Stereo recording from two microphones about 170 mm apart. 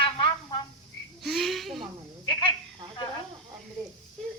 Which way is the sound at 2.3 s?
30° left (ahead or behind).